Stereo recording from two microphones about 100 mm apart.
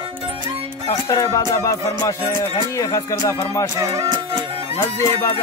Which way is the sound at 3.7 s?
35° right (ahead or behind).